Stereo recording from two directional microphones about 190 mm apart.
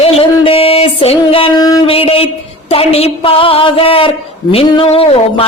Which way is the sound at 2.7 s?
30° left (ahead or behind).